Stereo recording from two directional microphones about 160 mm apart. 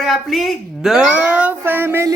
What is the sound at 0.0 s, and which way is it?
A woman's voice, centre (ahead or behind).